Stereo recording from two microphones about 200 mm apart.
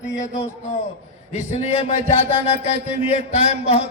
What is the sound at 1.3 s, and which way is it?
A man's voice, 35° left (ahead or behind).